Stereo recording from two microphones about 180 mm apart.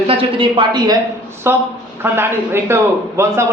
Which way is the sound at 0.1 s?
30° right (ahead or behind).